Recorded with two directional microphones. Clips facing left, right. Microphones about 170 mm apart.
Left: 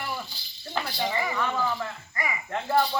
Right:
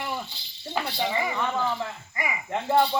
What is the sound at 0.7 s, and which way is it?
Speech, 20° right (ahead or behind).